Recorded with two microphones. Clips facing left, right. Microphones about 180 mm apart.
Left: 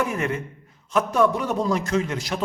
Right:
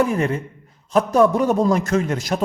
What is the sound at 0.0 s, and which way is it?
A man's voice, 35° right (ahead or behind).